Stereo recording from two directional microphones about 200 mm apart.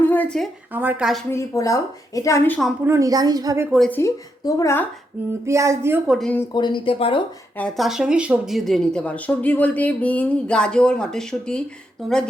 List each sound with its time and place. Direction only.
0.0 s a sound: 10° left (ahead or behind)
0.7 s a woman's voice: 10° right (ahead or behind)
1.3 s a woman's voice: 15° left (ahead or behind)
2.8 s a woman's voice: 15° right (ahead or behind)
3.7 s a woman's voice: 5° left (ahead or behind)
5.5 s a woman's voice: 15° right (ahead or behind)
6.1 s a woman's voice: 5° left (ahead or behind)
6.5 s speech: 20° left (ahead or behind)
7.6 s speech: centre (ahead or behind)